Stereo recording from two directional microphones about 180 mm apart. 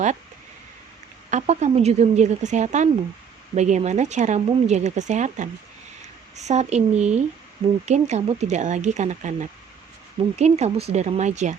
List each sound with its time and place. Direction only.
1.3 s speech: 40° right (ahead or behind)